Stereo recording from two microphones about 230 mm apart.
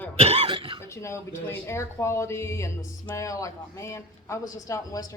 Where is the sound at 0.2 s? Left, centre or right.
Right.